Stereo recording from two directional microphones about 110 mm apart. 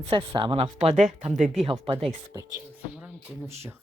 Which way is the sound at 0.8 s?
90° right.